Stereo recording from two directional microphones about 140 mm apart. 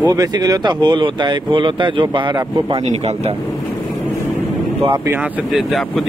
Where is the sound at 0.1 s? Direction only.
25° right (ahead or behind).